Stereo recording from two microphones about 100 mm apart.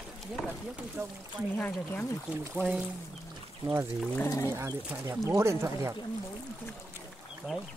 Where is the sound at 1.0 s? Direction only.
15° right (ahead or behind).